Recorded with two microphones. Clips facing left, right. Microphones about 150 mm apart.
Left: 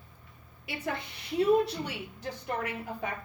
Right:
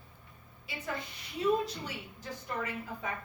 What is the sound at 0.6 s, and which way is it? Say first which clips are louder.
A woman's voice: left 4 dB; 70° left (ahead or behind).